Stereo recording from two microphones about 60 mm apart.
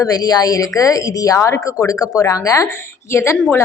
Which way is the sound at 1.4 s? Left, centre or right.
Left.